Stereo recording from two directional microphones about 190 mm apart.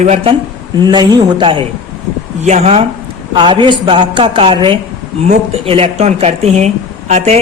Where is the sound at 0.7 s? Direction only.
20° right (ahead or behind).